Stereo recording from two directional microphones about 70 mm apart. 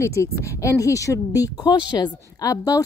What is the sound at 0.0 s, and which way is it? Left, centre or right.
Speech, left.